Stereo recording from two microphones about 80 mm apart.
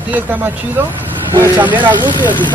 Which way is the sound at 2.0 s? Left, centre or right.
Left.